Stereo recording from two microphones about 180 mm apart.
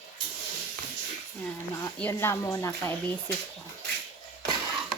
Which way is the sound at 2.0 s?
15° left (ahead or behind).